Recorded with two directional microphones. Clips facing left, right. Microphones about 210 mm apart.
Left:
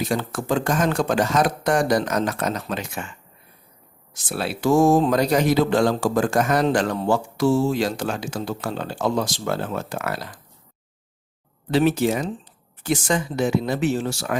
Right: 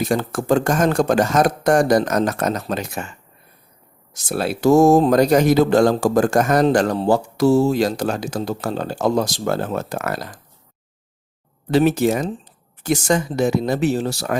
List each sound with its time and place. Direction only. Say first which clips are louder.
0.0 s speech: right 4 dB; 45° right (ahead or behind)
11.7 s speech: right 3 dB; 45° right (ahead or behind)